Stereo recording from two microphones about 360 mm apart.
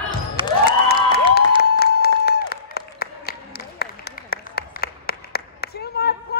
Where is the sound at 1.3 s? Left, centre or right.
Left.